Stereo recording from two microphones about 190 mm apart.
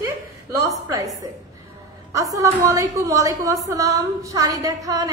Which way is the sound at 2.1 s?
15° right (ahead or behind).